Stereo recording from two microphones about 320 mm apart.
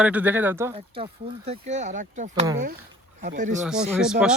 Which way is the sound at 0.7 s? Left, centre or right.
Centre.